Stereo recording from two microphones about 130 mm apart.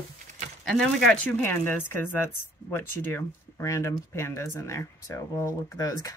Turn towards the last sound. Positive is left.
turn(degrees=25)  # may be behind; listen again after turning